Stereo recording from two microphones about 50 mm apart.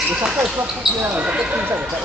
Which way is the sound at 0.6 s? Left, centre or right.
Right.